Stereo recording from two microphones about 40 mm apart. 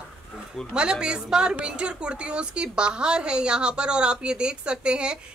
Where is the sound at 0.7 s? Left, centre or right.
Right.